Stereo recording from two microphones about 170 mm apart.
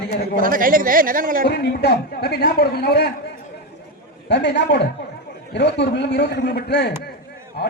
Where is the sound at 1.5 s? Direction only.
70° left (ahead or behind).